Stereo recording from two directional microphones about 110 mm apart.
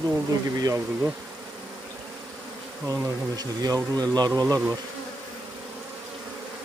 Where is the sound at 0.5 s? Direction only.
35° right (ahead or behind).